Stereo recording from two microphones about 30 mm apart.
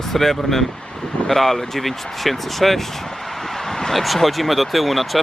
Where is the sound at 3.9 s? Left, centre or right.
Centre.